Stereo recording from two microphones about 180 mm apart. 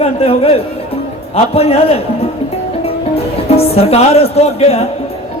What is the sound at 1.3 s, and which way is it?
Speech, 35° left (ahead or behind).